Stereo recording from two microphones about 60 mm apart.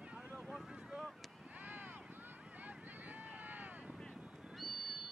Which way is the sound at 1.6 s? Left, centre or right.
Right.